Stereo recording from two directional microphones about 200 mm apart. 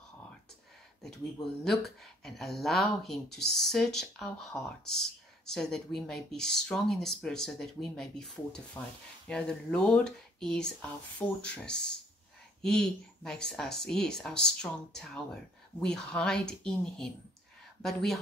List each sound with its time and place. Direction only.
1.0 s speech: centre (ahead or behind)